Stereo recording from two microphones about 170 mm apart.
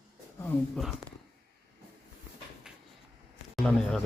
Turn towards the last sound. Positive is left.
turn(degrees=5)  # may be behind; listen again after turning